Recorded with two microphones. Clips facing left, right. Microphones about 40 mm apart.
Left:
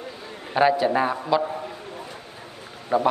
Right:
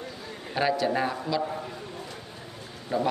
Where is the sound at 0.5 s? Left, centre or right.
Left.